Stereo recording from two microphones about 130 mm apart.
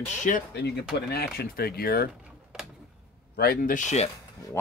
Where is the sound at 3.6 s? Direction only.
80° left.